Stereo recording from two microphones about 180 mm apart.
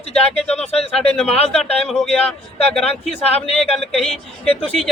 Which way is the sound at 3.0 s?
35° left (ahead or behind).